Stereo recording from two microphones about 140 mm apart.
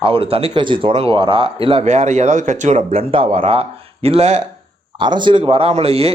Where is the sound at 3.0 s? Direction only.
40° right (ahead or behind).